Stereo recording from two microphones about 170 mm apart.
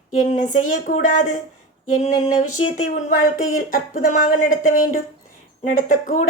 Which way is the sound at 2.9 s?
50° left (ahead or behind).